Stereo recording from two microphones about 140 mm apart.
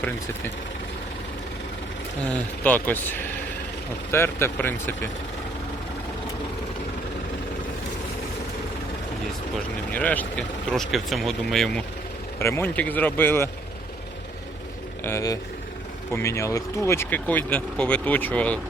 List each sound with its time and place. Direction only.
2.2 s speech: 10° left (ahead or behind)
9.9 s speech: 10° left (ahead or behind)
12.4 s speech: 20° left (ahead or behind)
15.0 s speech: 20° left (ahead or behind)